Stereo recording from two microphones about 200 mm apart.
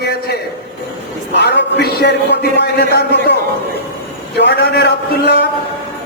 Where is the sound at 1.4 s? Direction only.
55° left (ahead or behind).